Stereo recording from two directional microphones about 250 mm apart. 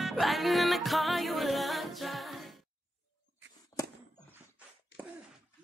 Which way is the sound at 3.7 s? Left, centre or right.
Centre.